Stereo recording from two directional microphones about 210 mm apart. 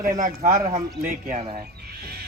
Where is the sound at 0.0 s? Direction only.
35° right (ahead or behind).